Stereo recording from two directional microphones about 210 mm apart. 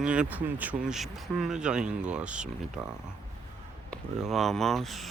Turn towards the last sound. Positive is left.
turn(degrees=0)  # may be behind; listen again after turning